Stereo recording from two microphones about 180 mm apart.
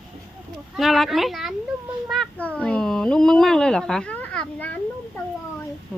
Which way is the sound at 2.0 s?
Centre (ahead or behind).